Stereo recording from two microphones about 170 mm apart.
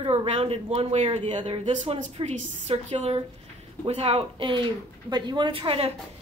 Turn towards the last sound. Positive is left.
turn(degrees=-30)  # may be behind; listen again after turning